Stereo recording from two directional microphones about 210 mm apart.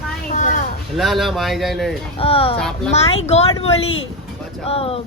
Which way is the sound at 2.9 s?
30° left (ahead or behind).